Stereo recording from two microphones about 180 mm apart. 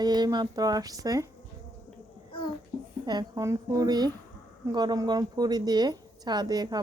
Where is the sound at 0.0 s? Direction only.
25° right (ahead or behind).